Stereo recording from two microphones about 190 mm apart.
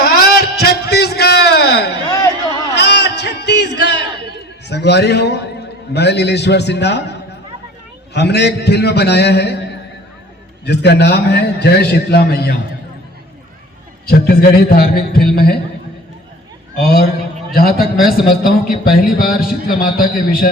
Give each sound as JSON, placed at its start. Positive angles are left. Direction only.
{"t": 0.0, "sound": "a sound", "side_deg": 55}
{"t": 8.1, "sound": "a man's voice", "side_deg": 60}
{"t": 10.7, "sound": "a man's voice", "side_deg": 60}
{"t": 14.1, "sound": "a man's voice", "side_deg": 55}
{"t": 16.7, "sound": "a man's voice", "side_deg": 55}